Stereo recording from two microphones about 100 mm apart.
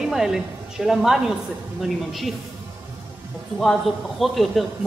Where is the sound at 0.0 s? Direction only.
5° right (ahead or behind).